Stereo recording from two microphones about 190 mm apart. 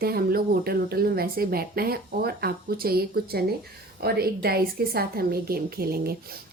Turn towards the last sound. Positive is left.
turn(degrees=-55)  # may be behind; listen again after turning